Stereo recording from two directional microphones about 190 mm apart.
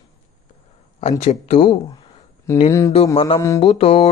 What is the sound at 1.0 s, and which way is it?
Speech, 35° left (ahead or behind).